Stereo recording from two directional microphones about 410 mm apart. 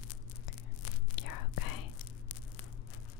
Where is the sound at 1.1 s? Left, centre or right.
Left.